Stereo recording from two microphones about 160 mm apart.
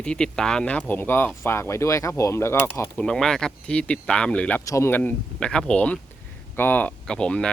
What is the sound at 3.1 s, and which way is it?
Speech, 5° left (ahead or behind).